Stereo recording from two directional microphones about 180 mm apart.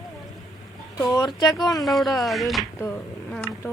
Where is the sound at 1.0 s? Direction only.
20° left (ahead or behind).